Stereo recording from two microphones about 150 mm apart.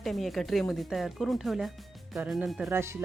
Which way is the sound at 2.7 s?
15° right (ahead or behind).